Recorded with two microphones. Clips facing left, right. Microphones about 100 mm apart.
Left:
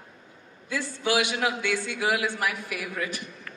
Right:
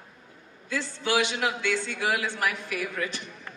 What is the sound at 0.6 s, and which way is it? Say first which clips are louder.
A man's voice: left 2 dB; 15° left (ahead or behind).